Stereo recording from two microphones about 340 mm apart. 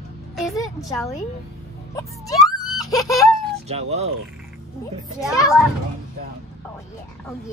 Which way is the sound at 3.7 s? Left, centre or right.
Centre.